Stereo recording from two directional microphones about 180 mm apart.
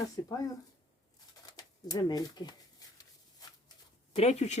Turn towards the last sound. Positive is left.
turn(degrees=35)  # may be behind; listen again after turning